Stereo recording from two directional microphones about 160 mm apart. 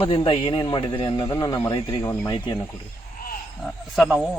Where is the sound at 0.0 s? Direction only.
30° left (ahead or behind).